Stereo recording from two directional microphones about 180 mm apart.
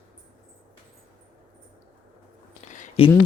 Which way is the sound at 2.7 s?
45° left (ahead or behind).